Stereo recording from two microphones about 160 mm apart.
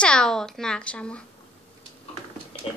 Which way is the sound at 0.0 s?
5° left (ahead or behind).